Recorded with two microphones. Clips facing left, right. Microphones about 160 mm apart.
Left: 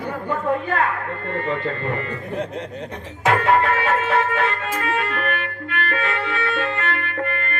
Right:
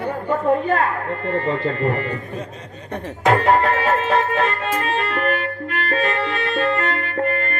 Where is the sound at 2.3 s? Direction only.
70° left (ahead or behind).